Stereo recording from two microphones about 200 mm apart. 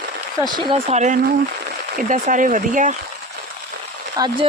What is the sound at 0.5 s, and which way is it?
Speech, 25° right (ahead or behind).